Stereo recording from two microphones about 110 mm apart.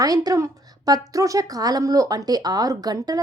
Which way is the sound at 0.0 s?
35° right (ahead or behind).